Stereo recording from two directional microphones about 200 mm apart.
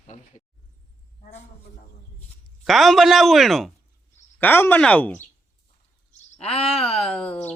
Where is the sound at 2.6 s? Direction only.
Centre (ahead or behind).